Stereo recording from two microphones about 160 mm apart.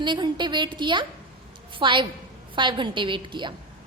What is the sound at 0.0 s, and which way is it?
A woman's voice, 30° right (ahead or behind).